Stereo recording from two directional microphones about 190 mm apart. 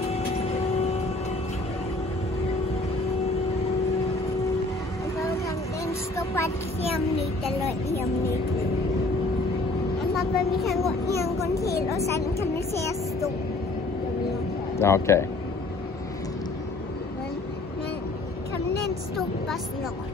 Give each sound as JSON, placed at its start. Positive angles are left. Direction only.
{"t": 5.9, "sound": "a sound", "side_deg": 15}
{"t": 10.1, "sound": "a woman's voice", "side_deg": 0}
{"t": 11.8, "sound": "speech", "side_deg": 15}
{"t": 14.8, "sound": "speech", "side_deg": 15}